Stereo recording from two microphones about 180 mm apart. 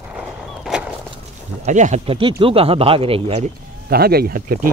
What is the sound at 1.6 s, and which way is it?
Speech, 40° right (ahead or behind).